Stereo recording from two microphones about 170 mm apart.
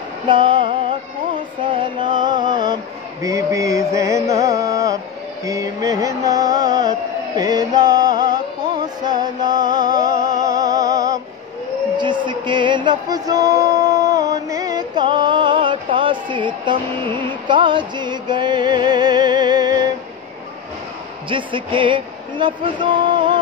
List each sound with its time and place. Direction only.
0.3 s music: 30° right (ahead or behind)
1.6 s a sound: 30° right (ahead or behind)
6.9 s music: 25° right (ahead or behind)
21.3 s speech: 30° right (ahead or behind)